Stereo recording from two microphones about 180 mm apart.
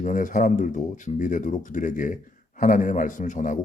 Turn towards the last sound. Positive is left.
turn(degrees=45)  # may be behind; listen again after turning